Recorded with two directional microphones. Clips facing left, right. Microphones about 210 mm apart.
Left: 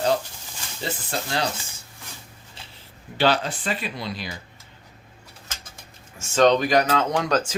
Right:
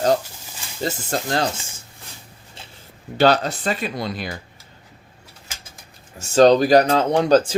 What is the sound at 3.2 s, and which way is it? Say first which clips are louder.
Speech: right 5 dB; 40° right (ahead or behind).